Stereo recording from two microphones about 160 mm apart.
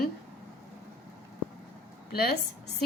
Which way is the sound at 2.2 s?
75° left (ahead or behind).